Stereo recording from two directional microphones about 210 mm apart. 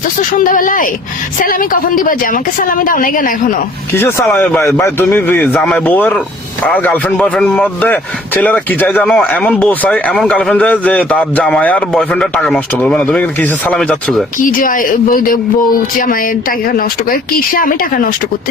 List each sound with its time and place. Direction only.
0.3 s a woman's voice: 40° left (ahead or behind)
3.9 s speech: 10° left (ahead or behind)
14.3 s a woman's voice: 40° left (ahead or behind)
16.7 s speech: 40° left (ahead or behind)